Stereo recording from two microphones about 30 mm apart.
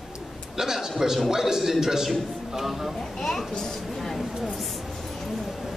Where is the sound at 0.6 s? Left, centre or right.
Centre.